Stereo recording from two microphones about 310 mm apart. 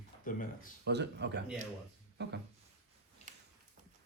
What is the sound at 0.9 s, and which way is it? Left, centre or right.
A man's voice, right.